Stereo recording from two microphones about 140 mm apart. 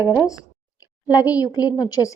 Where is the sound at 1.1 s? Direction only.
25° left (ahead or behind).